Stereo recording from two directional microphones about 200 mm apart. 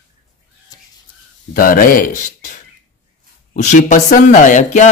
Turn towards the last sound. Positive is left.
turn(degrees=35)  # may be behind; listen again after turning